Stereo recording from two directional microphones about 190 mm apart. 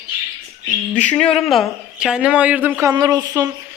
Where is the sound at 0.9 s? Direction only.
5° left (ahead or behind).